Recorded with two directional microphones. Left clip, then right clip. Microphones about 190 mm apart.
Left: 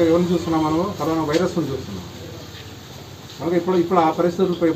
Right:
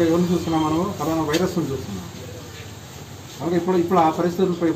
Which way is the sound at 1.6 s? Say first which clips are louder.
Left 1 dB; centre (ahead or behind).